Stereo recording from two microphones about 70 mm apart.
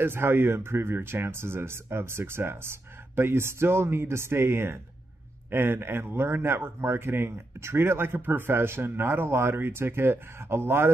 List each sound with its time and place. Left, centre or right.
0.0 s a man's voice: right